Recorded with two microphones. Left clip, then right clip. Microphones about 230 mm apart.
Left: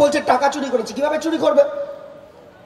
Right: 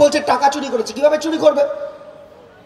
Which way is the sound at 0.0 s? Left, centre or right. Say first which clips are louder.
Right 2 dB; right.